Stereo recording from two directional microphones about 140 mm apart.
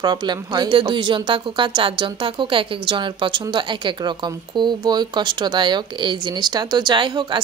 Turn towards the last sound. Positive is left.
turn(degrees=-35)  # may be behind; listen again after turning